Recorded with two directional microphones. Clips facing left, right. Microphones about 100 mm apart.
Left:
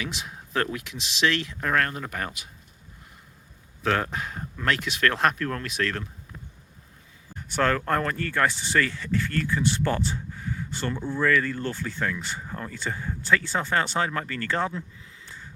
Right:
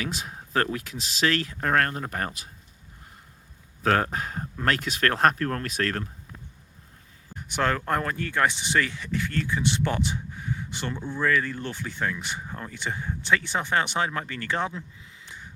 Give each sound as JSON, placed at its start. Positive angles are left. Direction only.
{"t": 0.0, "sound": "speech", "side_deg": -40}
{"t": 3.8, "sound": "speech", "side_deg": -40}
{"t": 7.3, "sound": "speech", "side_deg": -20}